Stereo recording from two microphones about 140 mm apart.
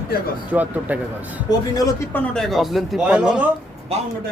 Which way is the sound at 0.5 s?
10° right (ahead or behind).